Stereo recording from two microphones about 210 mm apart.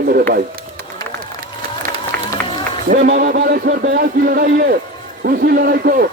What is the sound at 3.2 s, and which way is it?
Speech, 50° right (ahead or behind).